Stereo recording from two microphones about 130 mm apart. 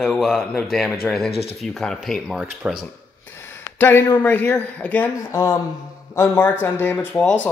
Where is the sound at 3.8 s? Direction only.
15° left (ahead or behind).